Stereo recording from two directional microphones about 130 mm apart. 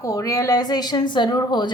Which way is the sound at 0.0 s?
25° left (ahead or behind).